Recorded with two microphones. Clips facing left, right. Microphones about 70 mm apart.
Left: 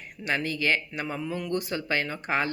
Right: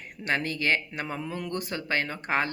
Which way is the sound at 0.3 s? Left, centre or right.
Right.